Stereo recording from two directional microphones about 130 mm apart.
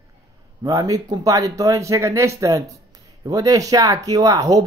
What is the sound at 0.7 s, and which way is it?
Speech, 25° right (ahead or behind).